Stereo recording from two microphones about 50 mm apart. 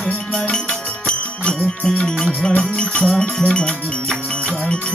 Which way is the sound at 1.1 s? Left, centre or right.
Centre.